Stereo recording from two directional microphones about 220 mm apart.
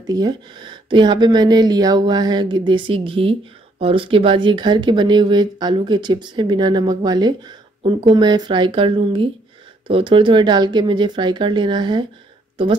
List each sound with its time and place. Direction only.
0.0 s speech: 15° right (ahead or behind)